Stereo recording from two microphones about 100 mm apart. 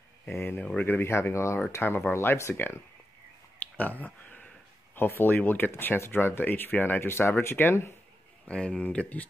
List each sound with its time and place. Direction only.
0.3 s speech: 20° left (ahead or behind)
8.5 s speech: 10° left (ahead or behind)